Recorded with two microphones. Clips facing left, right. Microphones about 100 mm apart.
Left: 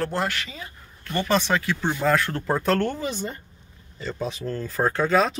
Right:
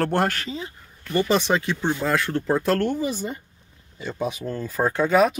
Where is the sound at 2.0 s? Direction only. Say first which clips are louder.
Left 1 dB; centre (ahead or behind).